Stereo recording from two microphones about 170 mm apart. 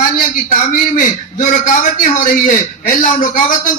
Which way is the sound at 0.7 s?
50° left (ahead or behind).